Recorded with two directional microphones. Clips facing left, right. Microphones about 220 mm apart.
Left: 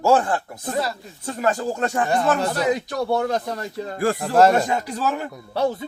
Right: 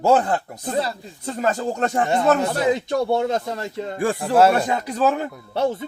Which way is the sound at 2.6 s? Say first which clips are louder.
Right 2 dB; 25° right (ahead or behind).